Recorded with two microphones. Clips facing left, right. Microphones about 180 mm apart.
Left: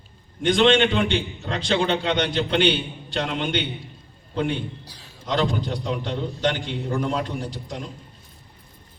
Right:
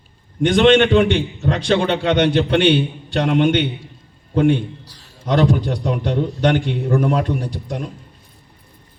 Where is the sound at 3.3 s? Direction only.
50° right (ahead or behind).